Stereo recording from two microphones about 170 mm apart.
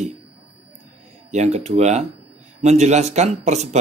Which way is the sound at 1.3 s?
40° right (ahead or behind).